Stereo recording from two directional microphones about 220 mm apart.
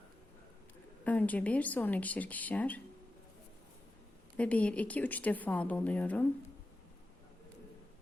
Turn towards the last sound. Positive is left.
turn(degrees=5)  # may be behind; listen again after turning